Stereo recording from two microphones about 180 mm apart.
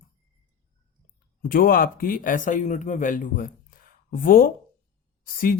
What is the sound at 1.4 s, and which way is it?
Speech, 55° left (ahead or behind).